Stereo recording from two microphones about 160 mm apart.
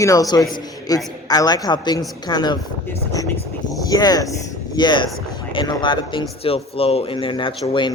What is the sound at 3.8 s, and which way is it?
A woman's voice, 25° left (ahead or behind).